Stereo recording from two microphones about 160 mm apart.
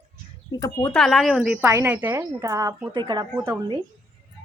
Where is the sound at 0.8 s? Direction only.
5° left (ahead or behind); by 3.2 s 30° right (ahead or behind).